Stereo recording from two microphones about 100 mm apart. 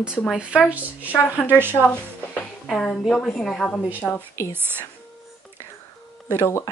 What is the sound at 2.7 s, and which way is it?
A woman's voice, 5° left (ahead or behind).